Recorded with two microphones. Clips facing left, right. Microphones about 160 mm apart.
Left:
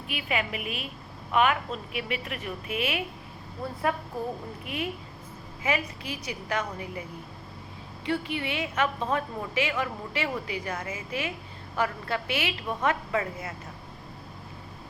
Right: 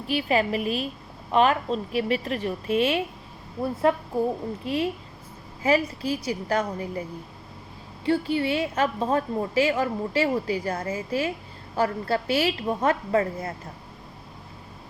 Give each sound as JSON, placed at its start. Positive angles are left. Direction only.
{"t": 0.1, "sound": "a woman's voice", "side_deg": -35}
{"t": 8.0, "sound": "a woman's voice", "side_deg": -35}